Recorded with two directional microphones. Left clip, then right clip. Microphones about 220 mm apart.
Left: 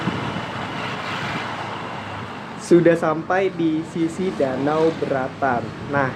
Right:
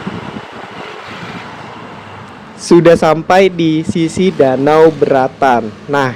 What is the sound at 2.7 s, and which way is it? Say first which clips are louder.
Speech: right 9 dB; 40° right (ahead or behind).